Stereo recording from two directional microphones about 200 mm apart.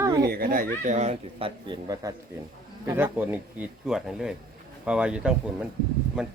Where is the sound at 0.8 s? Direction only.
35° right (ahead or behind).